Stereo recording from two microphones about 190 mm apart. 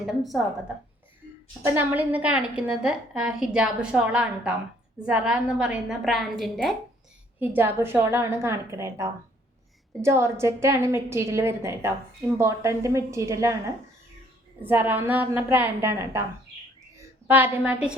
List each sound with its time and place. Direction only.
0.0 s a woman's voice: centre (ahead or behind)
1.6 s a woman's voice: 10° right (ahead or behind)
7.3 s a woman's voice: 10° right (ahead or behind)
14.6 s a woman's voice: 10° right (ahead or behind)
17.2 s a woman's voice: 10° right (ahead or behind)